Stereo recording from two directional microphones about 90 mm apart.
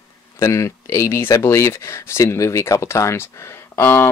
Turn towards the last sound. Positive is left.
turn(degrees=25)  # may be behind; listen again after turning